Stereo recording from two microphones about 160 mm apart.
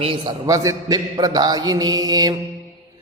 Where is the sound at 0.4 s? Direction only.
20° right (ahead or behind).